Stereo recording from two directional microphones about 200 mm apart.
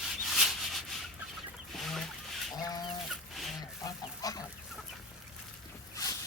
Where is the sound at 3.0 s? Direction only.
Centre (ahead or behind).